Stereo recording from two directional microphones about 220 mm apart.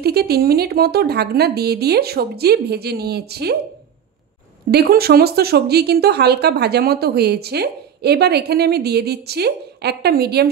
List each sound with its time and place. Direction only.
0.0 s speech: 45° right (ahead or behind)
4.6 s speech: 45° right (ahead or behind)